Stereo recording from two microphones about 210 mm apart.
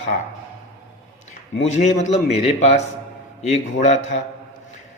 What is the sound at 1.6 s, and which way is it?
A man's voice, 30° left (ahead or behind).